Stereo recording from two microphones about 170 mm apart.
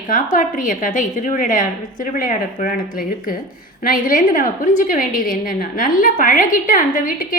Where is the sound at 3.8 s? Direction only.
55° left (ahead or behind).